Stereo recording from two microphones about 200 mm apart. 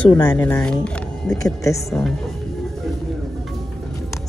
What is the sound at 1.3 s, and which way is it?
Speech, 15° left (ahead or behind).